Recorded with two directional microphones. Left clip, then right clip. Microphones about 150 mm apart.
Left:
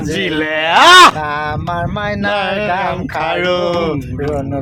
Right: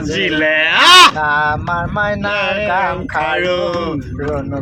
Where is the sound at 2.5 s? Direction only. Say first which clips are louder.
Even; 50° left (ahead or behind).